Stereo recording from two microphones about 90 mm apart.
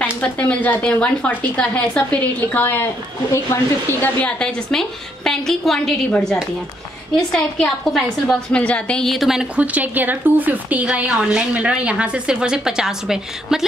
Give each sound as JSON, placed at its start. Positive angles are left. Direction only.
{"t": 0.0, "sound": "speech", "side_deg": 15}
{"t": 4.2, "sound": "a woman's voice", "side_deg": 10}
{"t": 7.2, "sound": "a woman's voice", "side_deg": 5}